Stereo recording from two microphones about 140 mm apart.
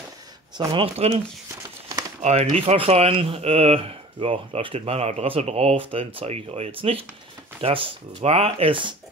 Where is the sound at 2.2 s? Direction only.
50° right (ahead or behind).